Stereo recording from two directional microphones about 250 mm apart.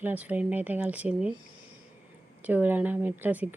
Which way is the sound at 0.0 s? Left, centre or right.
Centre.